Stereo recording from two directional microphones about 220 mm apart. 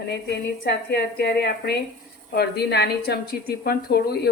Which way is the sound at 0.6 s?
50° left (ahead or behind).